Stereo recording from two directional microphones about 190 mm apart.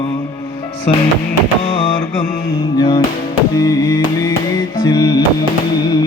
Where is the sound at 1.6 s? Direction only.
25° left (ahead or behind).